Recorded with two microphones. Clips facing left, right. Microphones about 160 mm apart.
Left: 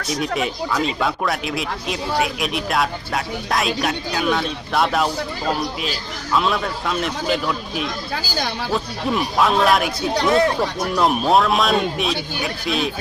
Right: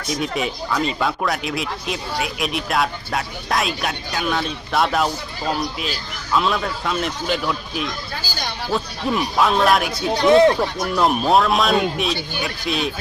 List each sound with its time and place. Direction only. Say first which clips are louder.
0.1 s speech: left 1 dB; centre (ahead or behind)
10.2 s speech: right 5 dB; 20° right (ahead or behind)
10.9 s speech: even; centre (ahead or behind)